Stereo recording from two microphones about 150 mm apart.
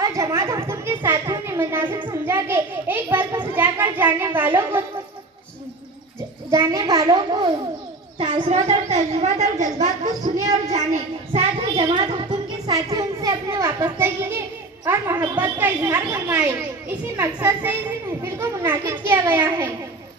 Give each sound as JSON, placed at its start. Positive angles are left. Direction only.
{"t": 0.0, "sound": "a woman's voice", "side_deg": -20}
{"t": 1.9, "sound": "a child's voice", "side_deg": -30}
{"t": 2.2, "sound": "a woman's voice", "side_deg": -15}
{"t": 6.5, "sound": "a woman's voice", "side_deg": -20}
{"t": 8.5, "sound": "a woman's voice", "side_deg": -50}
{"t": 11.9, "sound": "a woman's voice", "side_deg": -30}